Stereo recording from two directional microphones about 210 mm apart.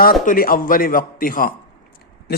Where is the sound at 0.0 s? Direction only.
45° left (ahead or behind).